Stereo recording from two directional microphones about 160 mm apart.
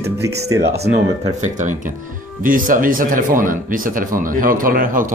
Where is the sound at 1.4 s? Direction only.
50° right (ahead or behind).